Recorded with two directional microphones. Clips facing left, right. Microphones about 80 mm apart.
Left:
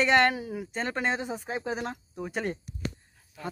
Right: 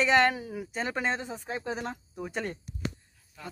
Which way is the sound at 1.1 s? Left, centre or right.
Centre.